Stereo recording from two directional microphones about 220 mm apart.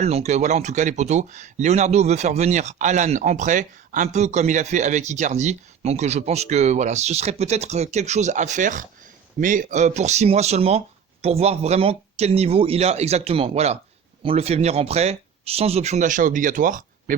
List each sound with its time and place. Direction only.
0.0 s speech: 30° right (ahead or behind)